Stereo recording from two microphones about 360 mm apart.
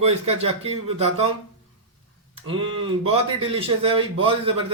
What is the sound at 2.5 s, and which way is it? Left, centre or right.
Speech, centre.